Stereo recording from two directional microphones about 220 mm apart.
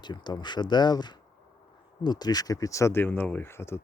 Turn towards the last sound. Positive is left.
turn(degrees=10)  # may be behind; listen again after turning